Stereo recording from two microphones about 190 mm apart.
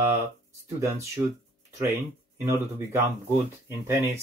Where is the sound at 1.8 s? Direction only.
15° right (ahead or behind).